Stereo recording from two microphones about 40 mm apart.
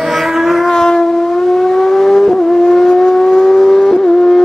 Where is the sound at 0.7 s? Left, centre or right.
Centre.